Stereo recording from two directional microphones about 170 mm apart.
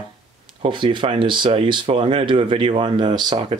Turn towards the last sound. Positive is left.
turn(degrees=-30)  # may be behind; listen again after turning